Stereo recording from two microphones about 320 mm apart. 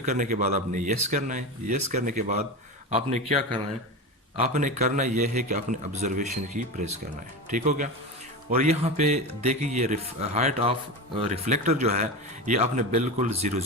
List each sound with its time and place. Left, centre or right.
0.0 s a man's voice: right